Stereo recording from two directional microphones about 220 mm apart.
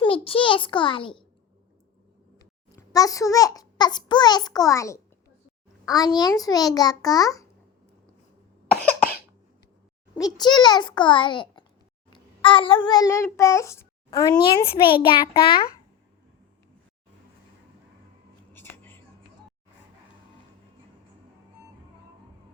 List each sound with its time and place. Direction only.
0.0 s a child's voice: 25° left (ahead or behind)
2.4 s a child's voice: 15° left (ahead or behind)
10.2 s a child's voice: 15° left (ahead or behind)
18.5 s a sound: 10° left (ahead or behind)